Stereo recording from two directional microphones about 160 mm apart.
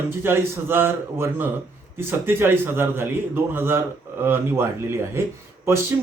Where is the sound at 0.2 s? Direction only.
15° right (ahead or behind).